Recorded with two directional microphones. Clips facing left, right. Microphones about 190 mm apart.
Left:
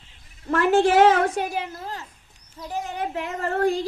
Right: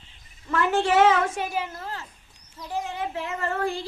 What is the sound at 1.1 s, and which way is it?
Speech, 35° left (ahead or behind).